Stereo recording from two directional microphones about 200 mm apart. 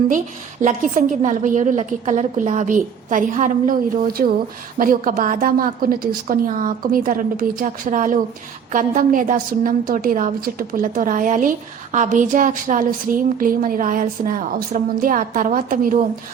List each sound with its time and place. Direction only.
0.6 s a woman's voice: 40° right (ahead or behind)